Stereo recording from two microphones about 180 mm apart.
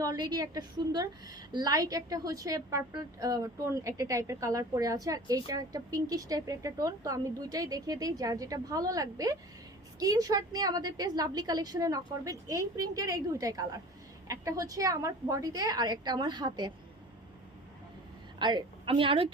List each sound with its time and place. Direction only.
0.0 s a woman's voice: 20° right (ahead or behind)
18.3 s a woman's voice: 25° right (ahead or behind)